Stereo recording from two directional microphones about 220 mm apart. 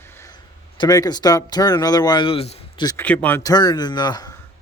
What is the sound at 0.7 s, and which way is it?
Speech, 20° left (ahead or behind).